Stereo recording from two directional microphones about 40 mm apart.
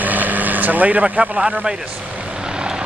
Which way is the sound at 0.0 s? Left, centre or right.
Right.